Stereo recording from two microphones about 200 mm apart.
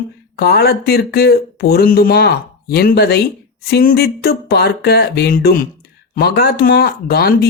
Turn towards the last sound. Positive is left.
turn(degrees=50)  # may be behind; listen again after turning